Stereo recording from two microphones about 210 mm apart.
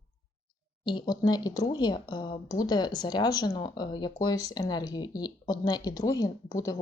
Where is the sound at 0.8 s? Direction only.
20° left (ahead or behind).